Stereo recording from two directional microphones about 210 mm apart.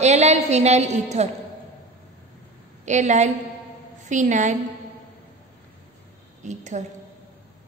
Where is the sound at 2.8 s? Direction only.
35° right (ahead or behind).